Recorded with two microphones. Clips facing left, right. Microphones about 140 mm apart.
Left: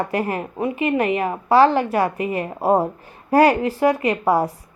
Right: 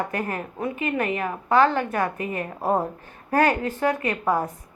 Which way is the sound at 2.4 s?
30° left (ahead or behind).